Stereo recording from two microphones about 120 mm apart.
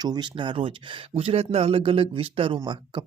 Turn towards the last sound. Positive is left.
turn(degrees=-45)  # may be behind; listen again after turning